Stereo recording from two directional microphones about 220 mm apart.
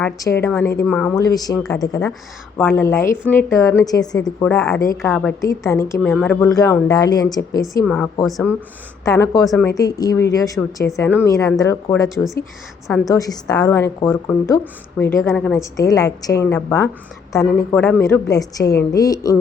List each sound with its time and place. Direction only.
0.0 s a woman's voice: 10° left (ahead or behind)
2.6 s a woman's voice: 10° left (ahead or behind)
5.4 s a woman's voice: 15° left (ahead or behind)
6.0 s a woman's voice: centre (ahead or behind)
6.6 s a woman's voice: 15° left (ahead or behind)
7.9 s a woman's voice: 5° left (ahead or behind)
9.0 s a woman's voice: 15° left (ahead or behind)
9.4 s a woman's voice: centre (ahead or behind)
9.6 s a woman's voice: 15° left (ahead or behind)
12.0 s a woman's voice: centre (ahead or behind)
12.9 s a woman's voice: 15° left (ahead or behind)